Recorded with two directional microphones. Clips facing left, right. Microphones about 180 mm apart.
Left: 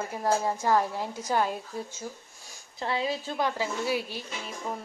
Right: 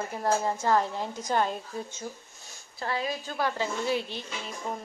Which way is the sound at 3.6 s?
10° left (ahead or behind).